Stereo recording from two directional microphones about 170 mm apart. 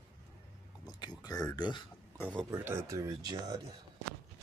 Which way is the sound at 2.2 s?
5° left (ahead or behind).